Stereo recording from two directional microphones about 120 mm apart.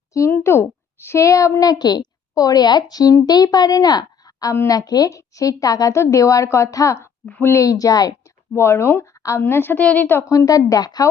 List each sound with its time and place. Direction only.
0.1 s a woman's voice: 25° left (ahead or behind)
7.3 s a woman's voice: 10° left (ahead or behind)
7.5 s a woman's voice: 30° left (ahead or behind)